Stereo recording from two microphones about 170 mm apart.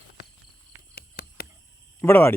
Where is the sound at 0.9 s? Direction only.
65° left (ahead or behind).